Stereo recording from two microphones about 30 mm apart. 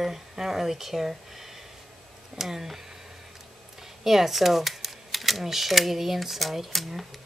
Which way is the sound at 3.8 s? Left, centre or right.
Centre.